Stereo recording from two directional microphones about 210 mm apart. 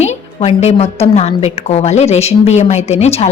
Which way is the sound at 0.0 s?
30° left (ahead or behind).